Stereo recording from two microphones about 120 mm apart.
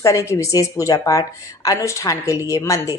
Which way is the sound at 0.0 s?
25° left (ahead or behind).